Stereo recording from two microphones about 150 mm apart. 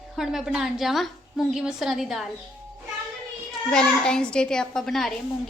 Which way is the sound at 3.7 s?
5° left (ahead or behind).